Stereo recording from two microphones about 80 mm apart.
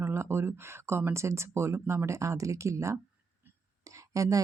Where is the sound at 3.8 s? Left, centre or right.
Right.